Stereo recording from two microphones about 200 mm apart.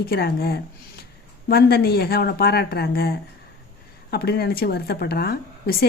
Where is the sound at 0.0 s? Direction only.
50° left (ahead or behind).